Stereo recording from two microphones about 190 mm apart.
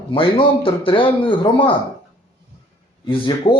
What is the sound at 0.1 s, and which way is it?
Speech, 30° left (ahead or behind).